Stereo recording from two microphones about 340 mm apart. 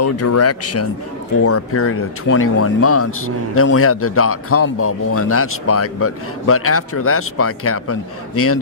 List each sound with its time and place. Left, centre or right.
0.0 s speech: left